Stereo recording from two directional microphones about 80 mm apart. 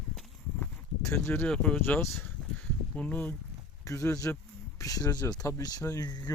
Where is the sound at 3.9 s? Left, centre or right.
Left.